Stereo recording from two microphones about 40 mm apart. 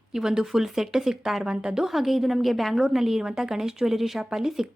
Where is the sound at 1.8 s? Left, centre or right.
Centre.